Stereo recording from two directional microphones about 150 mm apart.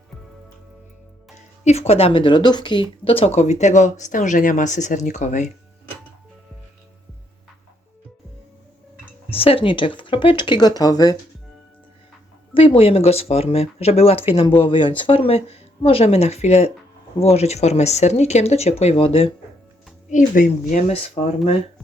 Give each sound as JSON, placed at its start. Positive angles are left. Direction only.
{"t": 1.9, "sound": "speech", "side_deg": 40}
{"t": 9.3, "sound": "speech", "side_deg": 40}
{"t": 12.5, "sound": "speech", "side_deg": 40}
{"t": 20.1, "sound": "speech", "side_deg": 60}